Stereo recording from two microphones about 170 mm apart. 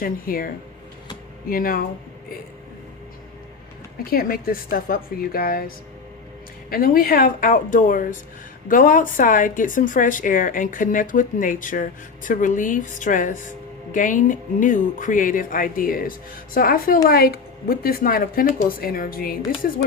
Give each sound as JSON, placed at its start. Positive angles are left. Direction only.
{"t": 0.0, "sound": "a woman's voice", "side_deg": 55}
{"t": 4.1, "sound": "a woman's voice", "side_deg": 60}